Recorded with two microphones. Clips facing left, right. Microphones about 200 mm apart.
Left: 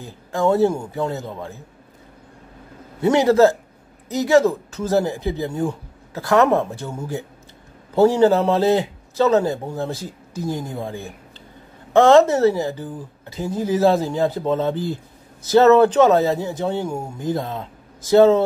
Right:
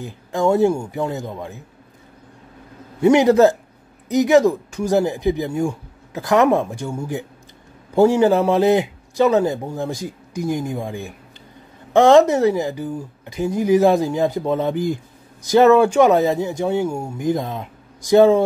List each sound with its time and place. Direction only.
0.0 s speech: 15° right (ahead or behind)
3.0 s speech: 15° right (ahead or behind)